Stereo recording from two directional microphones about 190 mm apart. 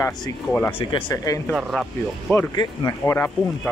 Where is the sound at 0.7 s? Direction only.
25° left (ahead or behind).